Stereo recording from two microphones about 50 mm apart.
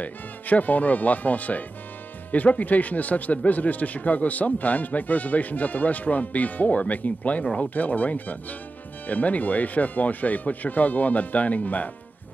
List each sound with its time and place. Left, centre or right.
0.0 s speech: left